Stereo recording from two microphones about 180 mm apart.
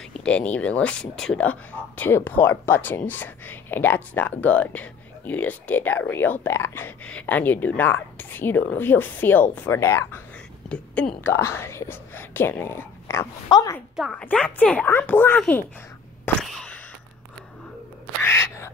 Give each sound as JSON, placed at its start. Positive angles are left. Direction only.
{"t": 0.1, "sound": "a woman's voice", "side_deg": 5}
{"t": 13.9, "sound": "speech", "side_deg": -5}
{"t": 16.3, "sound": "a sound", "side_deg": 5}
{"t": 18.2, "sound": "crow", "side_deg": 15}